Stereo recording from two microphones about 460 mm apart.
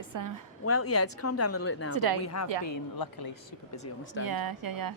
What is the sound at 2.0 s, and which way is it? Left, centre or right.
Speech, right.